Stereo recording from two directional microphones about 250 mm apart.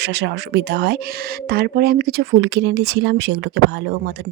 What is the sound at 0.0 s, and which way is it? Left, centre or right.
Speech, right.